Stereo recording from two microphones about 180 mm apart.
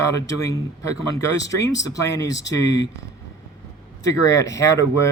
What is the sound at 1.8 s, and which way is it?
Speech, 20° left (ahead or behind).